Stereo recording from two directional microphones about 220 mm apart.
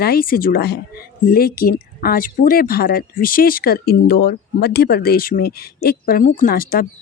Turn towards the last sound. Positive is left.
turn(degrees=40)  # may be behind; listen again after turning